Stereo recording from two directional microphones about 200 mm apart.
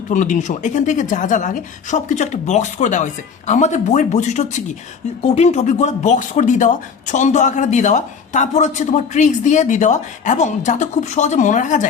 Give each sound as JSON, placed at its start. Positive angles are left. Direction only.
{"t": 0.1, "sound": "speech", "side_deg": 40}